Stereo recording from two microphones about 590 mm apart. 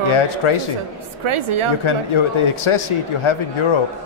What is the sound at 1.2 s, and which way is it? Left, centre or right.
Speech, right.